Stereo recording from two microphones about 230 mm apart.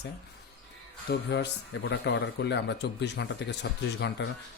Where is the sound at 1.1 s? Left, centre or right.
Left.